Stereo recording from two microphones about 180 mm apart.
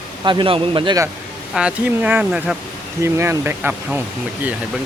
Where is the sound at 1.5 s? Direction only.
5° right (ahead or behind).